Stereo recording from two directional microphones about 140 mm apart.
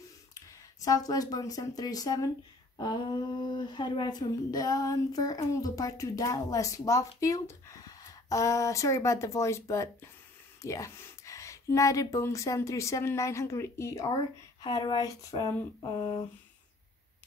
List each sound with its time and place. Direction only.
0.8 s a woman's voice: 25° left (ahead or behind)